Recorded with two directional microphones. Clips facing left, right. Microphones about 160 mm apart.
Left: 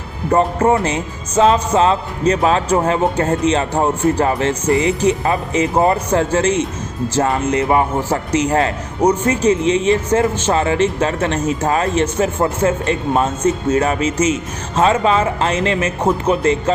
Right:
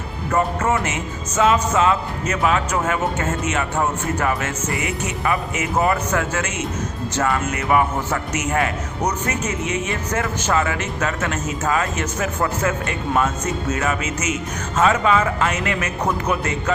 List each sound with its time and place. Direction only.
0.3 s a man's voice: 30° left (ahead or behind)